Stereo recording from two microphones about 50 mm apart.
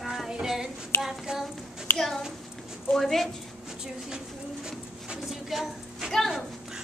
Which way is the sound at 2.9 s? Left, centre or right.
Centre.